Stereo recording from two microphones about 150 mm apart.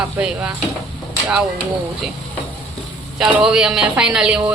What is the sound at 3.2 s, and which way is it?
A woman's voice, 5° right (ahead or behind).